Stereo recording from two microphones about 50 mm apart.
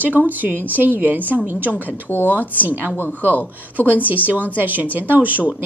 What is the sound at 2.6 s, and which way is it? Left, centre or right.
A woman's voice, right.